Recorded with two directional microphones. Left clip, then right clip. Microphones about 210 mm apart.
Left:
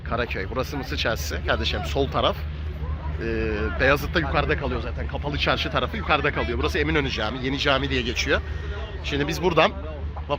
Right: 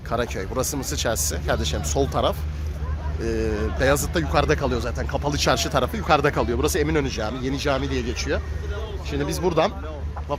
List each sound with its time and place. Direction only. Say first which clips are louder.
0.1 s speech: right 1 dB; 15° right (ahead or behind)
4.4 s speech: right 3 dB; 25° right (ahead or behind); by 9.7 s 5° right (ahead or behind)